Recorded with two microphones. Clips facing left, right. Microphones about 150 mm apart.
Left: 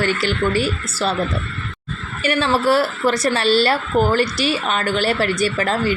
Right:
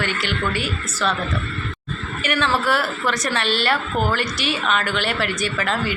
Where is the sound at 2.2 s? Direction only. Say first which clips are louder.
Left 4 dB; 35° left (ahead or behind).